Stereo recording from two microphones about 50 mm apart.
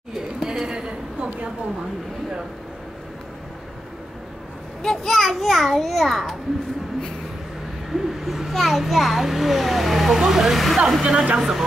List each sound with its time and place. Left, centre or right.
0.1 s a sound: centre
4.8 s a child's voice: centre
7.9 s a child's voice: centre
11.0 s speech: centre